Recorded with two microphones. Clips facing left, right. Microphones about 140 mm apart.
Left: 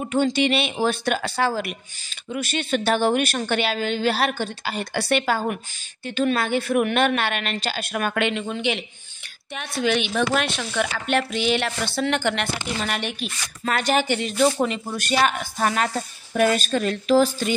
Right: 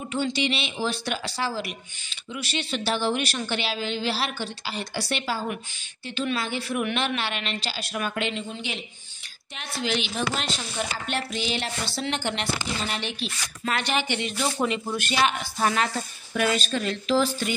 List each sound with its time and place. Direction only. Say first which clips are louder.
0.0 s speech: left 6 dB; 50° left (ahead or behind)